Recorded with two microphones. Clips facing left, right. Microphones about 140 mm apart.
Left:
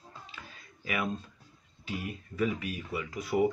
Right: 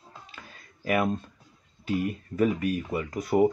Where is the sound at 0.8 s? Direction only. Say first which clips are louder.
Right 8 dB; 50° right (ahead or behind).